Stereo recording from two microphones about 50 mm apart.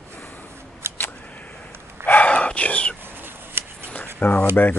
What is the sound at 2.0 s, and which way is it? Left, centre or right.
Whispering, left.